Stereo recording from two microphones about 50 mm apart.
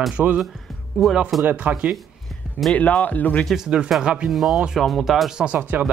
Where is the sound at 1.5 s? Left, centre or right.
Right.